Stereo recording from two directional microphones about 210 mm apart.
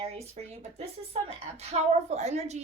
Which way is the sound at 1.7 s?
30° right (ahead or behind).